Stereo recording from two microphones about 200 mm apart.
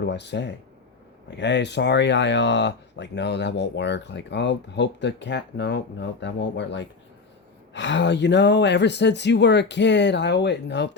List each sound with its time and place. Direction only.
0.0 s speech: 60° left (ahead or behind)